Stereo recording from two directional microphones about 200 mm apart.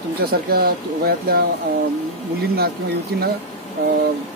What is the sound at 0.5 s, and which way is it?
Speech, 50° right (ahead or behind).